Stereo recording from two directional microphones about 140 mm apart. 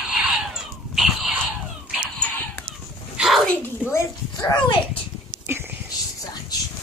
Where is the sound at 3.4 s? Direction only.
15° left (ahead or behind).